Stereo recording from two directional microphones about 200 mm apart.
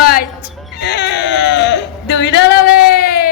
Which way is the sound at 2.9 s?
50° left (ahead or behind).